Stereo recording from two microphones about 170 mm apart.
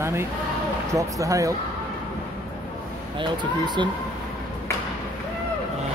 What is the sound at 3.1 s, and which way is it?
Speech, 25° right (ahead or behind).